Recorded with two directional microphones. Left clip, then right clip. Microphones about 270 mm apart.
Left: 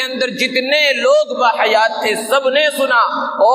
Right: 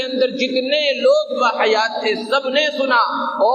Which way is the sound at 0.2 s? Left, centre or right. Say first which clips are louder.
Even; left.